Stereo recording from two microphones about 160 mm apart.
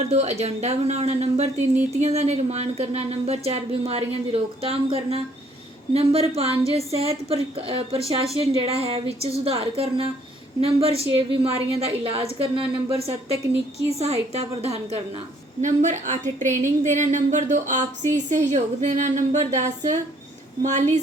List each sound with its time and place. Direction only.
0.0 s a woman's voice: 45° right (ahead or behind)